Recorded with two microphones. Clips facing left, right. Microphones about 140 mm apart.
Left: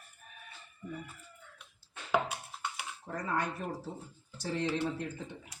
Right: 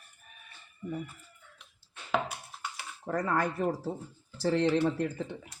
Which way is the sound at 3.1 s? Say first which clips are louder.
Right 5 dB; 70° right (ahead or behind).